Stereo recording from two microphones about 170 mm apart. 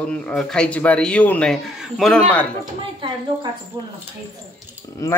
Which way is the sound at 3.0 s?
30° right (ahead or behind).